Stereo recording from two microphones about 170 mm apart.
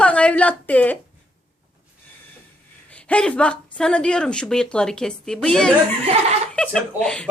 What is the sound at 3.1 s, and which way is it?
A woman's voice, 5° left (ahead or behind).